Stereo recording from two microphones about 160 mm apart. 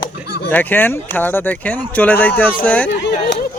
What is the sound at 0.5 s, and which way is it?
Speech, 10° left (ahead or behind).